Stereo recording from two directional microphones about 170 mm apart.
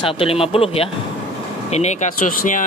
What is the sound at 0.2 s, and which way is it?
Speech, 35° left (ahead or behind).